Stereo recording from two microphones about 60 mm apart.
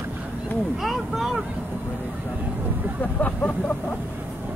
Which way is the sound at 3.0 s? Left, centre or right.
Left.